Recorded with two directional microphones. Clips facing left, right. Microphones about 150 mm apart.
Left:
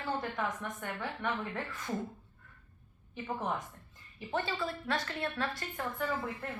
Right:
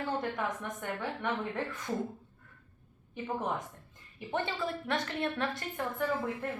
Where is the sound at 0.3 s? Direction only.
15° right (ahead or behind).